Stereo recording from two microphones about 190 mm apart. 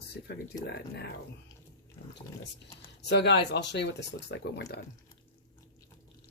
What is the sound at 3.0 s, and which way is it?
Speech, 65° left (ahead or behind).